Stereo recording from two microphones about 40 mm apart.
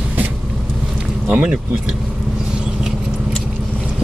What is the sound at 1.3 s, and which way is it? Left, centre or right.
Speech, right.